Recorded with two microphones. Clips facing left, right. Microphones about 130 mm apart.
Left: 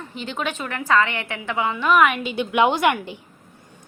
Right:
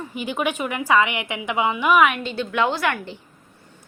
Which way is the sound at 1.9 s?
Centre (ahead or behind).